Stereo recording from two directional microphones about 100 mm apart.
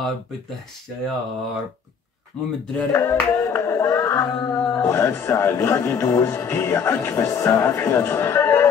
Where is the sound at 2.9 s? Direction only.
30° left (ahead or behind).